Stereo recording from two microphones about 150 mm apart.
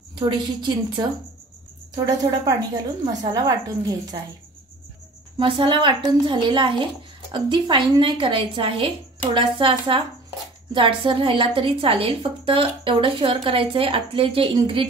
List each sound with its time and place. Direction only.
0.1 s a woman's voice: 30° right (ahead or behind)
5.4 s a woman's voice: 35° right (ahead or behind)